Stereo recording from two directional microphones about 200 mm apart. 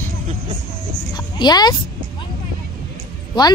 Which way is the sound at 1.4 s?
20° left (ahead or behind).